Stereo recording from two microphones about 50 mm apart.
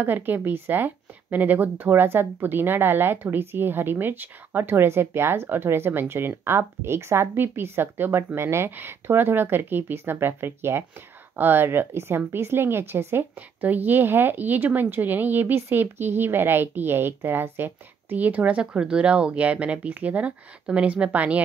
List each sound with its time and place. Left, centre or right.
0.0 s a woman's voice: right
8.4 s speech: right
8.7 s a woman's voice: right
13.6 s speech: right